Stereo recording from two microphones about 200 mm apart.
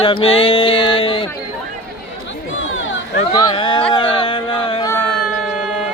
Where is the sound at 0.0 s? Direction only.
25° left (ahead or behind).